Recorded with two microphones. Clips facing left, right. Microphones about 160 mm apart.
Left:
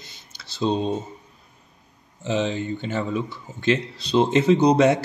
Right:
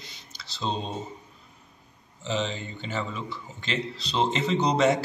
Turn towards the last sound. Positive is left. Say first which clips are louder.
# left 6 dB
turn(degrees=60)  # may be behind; listen again after turning